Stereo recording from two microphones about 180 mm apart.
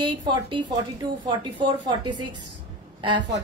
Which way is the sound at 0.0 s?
25° right (ahead or behind).